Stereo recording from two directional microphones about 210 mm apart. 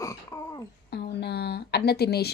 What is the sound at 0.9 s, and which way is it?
Speech, 55° left (ahead or behind).